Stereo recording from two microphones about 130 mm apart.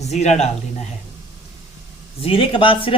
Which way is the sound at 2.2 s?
45° left (ahead or behind).